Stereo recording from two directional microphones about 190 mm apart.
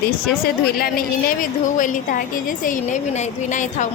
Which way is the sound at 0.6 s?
50° left (ahead or behind).